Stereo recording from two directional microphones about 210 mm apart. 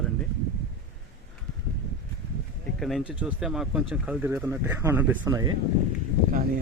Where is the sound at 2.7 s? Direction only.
Centre (ahead or behind).